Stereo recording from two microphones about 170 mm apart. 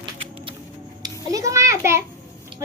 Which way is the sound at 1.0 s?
20° right (ahead or behind).